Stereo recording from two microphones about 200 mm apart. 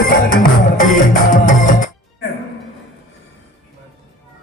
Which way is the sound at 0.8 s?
40° left (ahead or behind).